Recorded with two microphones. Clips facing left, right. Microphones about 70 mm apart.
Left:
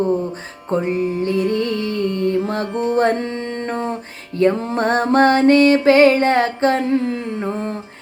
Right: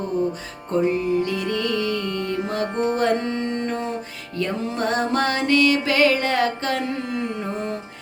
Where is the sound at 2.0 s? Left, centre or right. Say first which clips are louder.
Left 6 dB; right.